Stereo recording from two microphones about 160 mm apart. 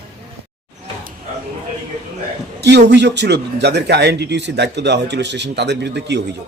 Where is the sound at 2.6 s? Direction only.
90° right.